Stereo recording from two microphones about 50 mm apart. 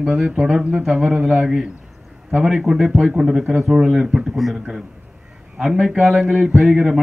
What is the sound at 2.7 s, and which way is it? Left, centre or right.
A man's voice, centre.